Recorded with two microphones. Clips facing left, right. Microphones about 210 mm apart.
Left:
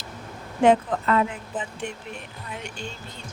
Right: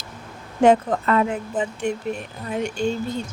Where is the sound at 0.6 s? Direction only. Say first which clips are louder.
Right 3 dB; 45° right (ahead or behind).